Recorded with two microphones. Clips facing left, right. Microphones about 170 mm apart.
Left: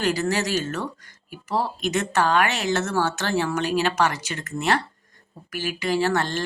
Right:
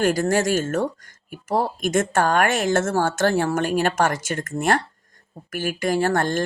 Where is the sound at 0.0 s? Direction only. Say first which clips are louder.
Right 4 dB; 50° right (ahead or behind).